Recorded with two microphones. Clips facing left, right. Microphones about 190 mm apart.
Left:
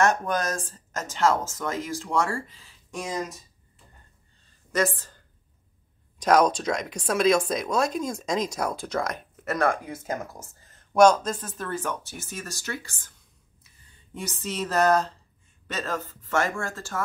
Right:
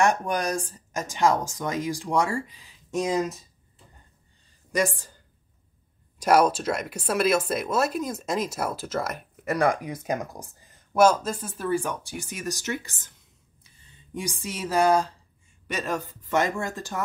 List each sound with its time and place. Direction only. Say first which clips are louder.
0.0 s speech: even; 15° right (ahead or behind)
4.7 s speech: even; 15° right (ahead or behind)